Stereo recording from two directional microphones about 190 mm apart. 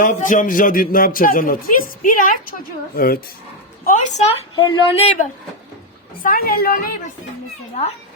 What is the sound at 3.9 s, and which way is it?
Speech, 40° left (ahead or behind).